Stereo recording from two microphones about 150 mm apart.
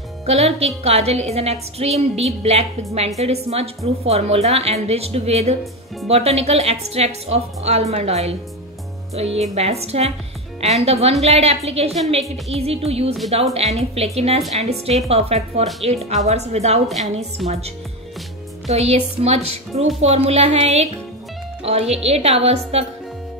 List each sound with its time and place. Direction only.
0.3 s a woman's voice: 45° right (ahead or behind)